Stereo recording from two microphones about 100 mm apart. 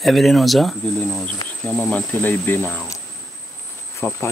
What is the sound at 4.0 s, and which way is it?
Speech, 25° left (ahead or behind).